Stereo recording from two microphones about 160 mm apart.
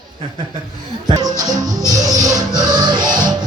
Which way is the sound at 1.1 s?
25° right (ahead or behind).